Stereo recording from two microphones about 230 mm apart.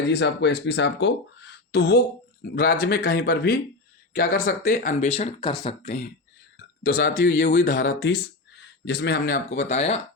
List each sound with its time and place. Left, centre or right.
0.1 s speech: left
6.8 s speech: left